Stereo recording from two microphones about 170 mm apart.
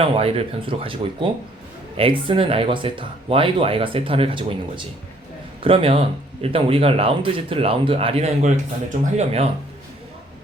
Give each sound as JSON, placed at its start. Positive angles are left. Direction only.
{"t": 0.0, "sound": "speech", "side_deg": -35}